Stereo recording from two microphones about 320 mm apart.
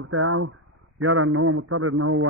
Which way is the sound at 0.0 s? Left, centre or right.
Right.